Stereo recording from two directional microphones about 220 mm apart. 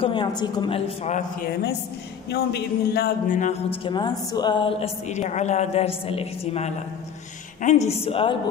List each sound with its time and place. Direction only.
0.0 s a woman's voice: 20° left (ahead or behind)
2.2 s a man's voice: 50° left (ahead or behind)
3.7 s a woman's voice: 20° left (ahead or behind)